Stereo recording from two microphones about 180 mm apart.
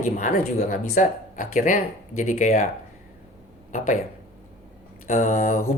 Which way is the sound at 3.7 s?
40° left (ahead or behind).